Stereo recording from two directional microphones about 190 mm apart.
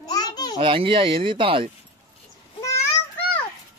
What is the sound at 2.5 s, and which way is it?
Child singing, 15° left (ahead or behind).